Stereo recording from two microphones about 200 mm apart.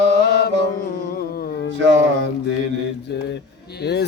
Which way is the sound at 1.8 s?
70° right (ahead or behind).